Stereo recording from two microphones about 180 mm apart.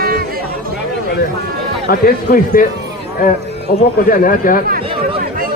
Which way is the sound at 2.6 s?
55° left (ahead or behind).